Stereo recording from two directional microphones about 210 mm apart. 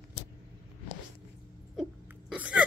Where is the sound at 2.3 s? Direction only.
5° right (ahead or behind).